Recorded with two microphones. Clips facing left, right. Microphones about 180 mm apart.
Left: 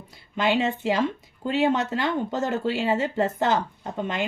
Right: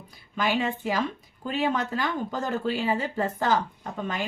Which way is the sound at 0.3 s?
25° left (ahead or behind).